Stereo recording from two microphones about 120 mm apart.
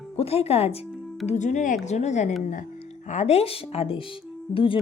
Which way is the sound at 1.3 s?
85° left.